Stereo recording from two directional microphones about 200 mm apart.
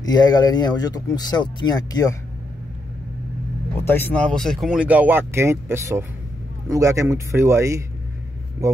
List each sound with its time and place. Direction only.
0.0 s speech: 20° left (ahead or behind)
3.8 s speech: 10° left (ahead or behind); by 7.8 s 15° right (ahead or behind)